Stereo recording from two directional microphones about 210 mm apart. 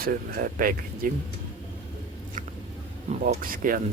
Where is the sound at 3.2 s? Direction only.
40° right (ahead or behind).